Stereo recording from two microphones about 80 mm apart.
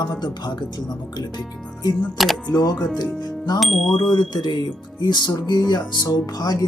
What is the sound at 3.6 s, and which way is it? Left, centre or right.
Speech, centre.